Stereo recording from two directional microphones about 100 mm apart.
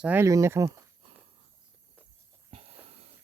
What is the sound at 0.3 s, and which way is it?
Speech, 30° right (ahead or behind).